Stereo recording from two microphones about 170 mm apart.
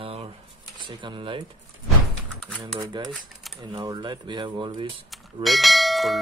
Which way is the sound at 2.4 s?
Centre (ahead or behind).